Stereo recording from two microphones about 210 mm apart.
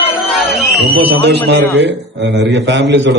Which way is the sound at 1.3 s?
55° right (ahead or behind).